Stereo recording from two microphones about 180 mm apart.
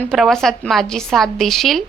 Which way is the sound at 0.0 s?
Centre (ahead or behind).